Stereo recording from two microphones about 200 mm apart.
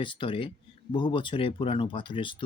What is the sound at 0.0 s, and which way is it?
Speech, 25° left (ahead or behind).